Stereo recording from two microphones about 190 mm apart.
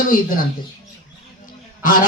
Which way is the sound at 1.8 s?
45° left (ahead or behind).